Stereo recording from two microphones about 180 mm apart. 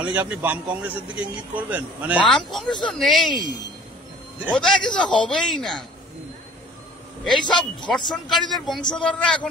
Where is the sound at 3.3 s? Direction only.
25° left (ahead or behind).